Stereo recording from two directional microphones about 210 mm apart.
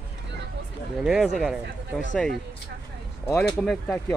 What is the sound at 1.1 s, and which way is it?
Speech, 5° right (ahead or behind).